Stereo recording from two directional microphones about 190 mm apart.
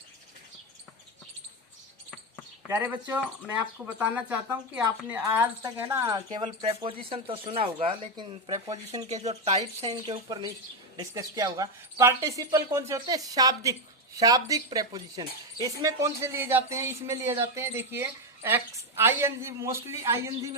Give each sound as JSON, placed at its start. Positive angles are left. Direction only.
{"t": 2.6, "sound": "speech", "side_deg": -10}
{"t": 9.0, "sound": "speech", "side_deg": -35}
{"t": 9.9, "sound": "speech", "side_deg": -20}